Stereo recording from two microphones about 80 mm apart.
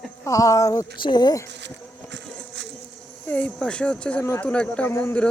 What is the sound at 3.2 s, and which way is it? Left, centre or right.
Speech, centre.